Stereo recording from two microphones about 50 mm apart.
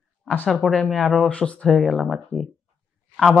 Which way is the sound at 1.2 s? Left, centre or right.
Centre.